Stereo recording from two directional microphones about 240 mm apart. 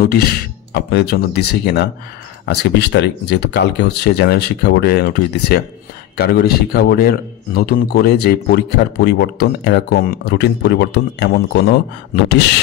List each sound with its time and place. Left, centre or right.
0.0 s speech: left